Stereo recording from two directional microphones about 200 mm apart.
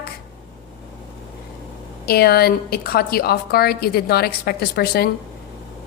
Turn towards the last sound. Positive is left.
turn(degrees=50)  # may be behind; listen again after turning